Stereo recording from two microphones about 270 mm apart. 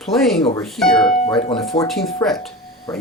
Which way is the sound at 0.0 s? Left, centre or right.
Centre.